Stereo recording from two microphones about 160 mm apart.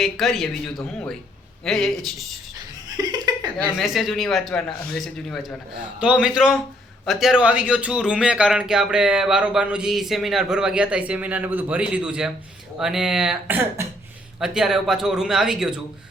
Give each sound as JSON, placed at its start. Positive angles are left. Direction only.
{"t": 0.0, "sound": "a man's voice", "side_deg": 0}
{"t": 2.9, "sound": "chuckle", "side_deg": -25}
{"t": 3.8, "sound": "a man's voice", "side_deg": 0}